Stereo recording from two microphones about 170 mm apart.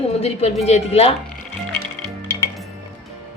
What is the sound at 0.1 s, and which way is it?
A woman's voice, 40° left (ahead or behind).